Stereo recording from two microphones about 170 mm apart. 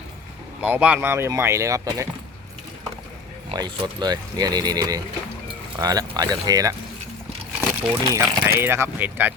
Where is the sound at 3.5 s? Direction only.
25° right (ahead or behind).